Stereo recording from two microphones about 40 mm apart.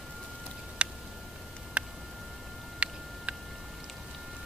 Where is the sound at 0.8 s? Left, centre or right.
Right.